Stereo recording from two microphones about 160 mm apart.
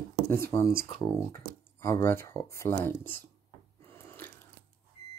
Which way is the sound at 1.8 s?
15° left (ahead or behind).